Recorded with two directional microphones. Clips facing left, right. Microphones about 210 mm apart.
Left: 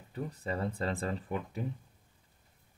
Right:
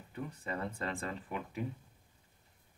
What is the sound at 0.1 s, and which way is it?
Speech, 35° left (ahead or behind).